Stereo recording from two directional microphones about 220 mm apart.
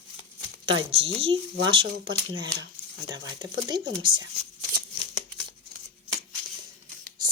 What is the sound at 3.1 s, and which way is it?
Speech, 20° right (ahead or behind).